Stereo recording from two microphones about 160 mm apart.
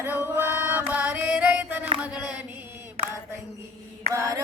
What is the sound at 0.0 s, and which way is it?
Music, 10° right (ahead or behind).